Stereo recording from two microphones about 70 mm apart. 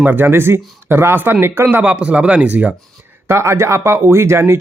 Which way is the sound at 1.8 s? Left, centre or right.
Centre.